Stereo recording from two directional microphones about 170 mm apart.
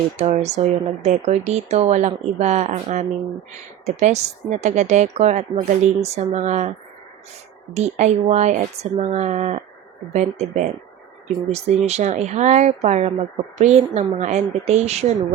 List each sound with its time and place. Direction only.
0.2 s speech: 40° right (ahead or behind)